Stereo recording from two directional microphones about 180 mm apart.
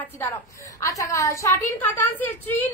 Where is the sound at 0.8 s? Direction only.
20° left (ahead or behind).